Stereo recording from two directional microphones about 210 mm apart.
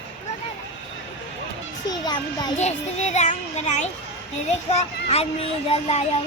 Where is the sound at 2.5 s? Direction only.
30° left (ahead or behind).